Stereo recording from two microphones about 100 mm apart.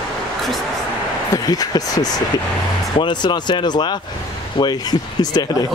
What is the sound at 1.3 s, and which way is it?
Speech, 40° left (ahead or behind).